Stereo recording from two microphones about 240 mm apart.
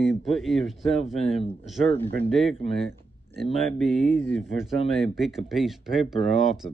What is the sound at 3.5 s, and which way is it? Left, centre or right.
Speech, centre.